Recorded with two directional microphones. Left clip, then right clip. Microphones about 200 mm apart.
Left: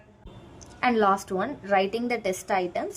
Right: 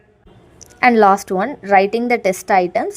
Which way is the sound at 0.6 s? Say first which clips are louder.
Right 12 dB; 40° right (ahead or behind).